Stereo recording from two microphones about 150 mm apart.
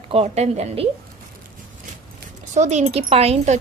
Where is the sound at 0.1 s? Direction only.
45° right (ahead or behind).